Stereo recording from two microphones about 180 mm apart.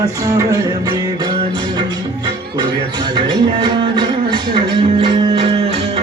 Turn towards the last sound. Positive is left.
turn(degrees=-30)  # may be behind; listen again after turning